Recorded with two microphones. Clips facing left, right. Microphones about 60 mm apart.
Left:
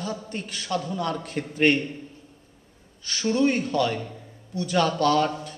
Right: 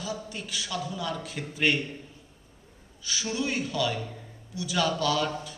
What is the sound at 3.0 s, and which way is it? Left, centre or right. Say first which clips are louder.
A man's voice: left 8 dB; left.